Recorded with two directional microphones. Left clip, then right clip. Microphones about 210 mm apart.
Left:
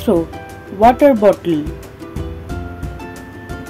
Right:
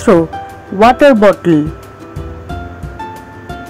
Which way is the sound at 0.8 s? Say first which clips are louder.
Right 3 dB; 15° right (ahead or behind).